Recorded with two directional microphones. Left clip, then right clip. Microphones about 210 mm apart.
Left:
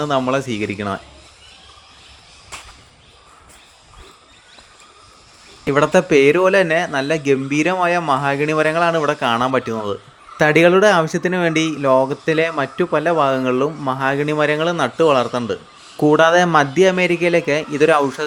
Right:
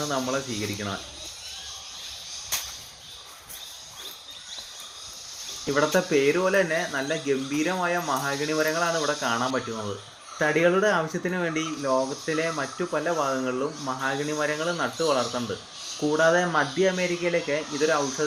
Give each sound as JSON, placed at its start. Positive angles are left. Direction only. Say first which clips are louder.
{"t": 0.0, "sound": "speech", "louder": "left 9 dB", "side_deg": 40}
{"t": 2.5, "sound": "whip", "louder": "right 4 dB", "side_deg": 0}
{"t": 5.6, "sound": "speech", "louder": "left 9 dB", "side_deg": 45}